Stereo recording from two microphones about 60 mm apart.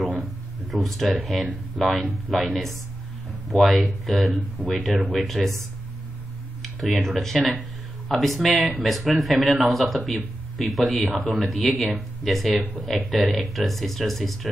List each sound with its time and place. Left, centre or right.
0.0 s a sound: centre
1.2 s speech: centre
4.9 s speech: right
5.2 s speech: centre
6.6 s speech: centre